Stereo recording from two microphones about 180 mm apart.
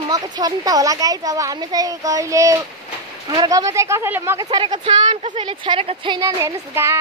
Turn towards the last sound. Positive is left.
turn(degrees=-15)  # may be behind; listen again after turning